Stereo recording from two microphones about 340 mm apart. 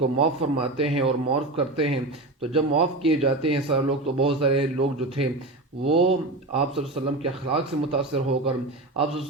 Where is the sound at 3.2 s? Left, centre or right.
Centre.